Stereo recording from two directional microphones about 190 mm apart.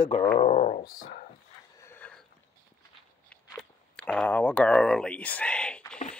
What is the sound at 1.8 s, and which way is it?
Mechanisms, 10° left (ahead or behind).